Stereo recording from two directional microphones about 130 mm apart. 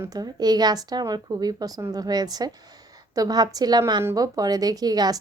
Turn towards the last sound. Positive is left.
turn(degrees=-30)  # may be behind; listen again after turning